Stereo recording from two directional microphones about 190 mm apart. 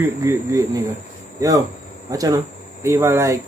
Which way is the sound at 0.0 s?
15° right (ahead or behind).